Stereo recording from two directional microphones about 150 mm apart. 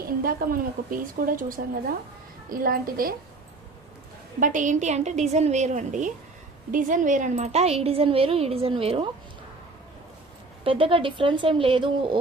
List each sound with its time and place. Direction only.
0.0 s a woman's voice: 80° right
4.4 s speech: 60° right (ahead or behind); by 9.0 s 40° right (ahead or behind)
10.6 s speech: 35° right (ahead or behind)